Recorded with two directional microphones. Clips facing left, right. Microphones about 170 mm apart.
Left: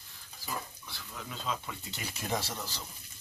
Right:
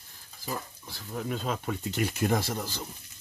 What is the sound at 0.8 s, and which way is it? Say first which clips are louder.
Speech: right 10 dB; 40° right (ahead or behind).